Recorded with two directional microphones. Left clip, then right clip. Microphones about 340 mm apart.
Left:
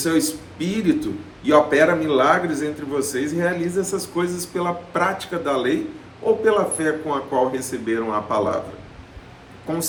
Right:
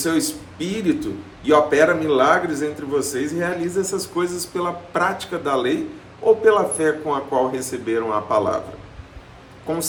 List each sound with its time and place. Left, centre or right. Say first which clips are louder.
0.0 s a man's voice: left 1 dB; centre